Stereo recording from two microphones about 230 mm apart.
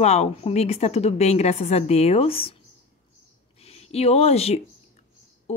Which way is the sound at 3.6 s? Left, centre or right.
Left.